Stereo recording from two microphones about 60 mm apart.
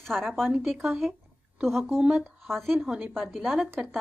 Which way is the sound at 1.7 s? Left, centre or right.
Centre.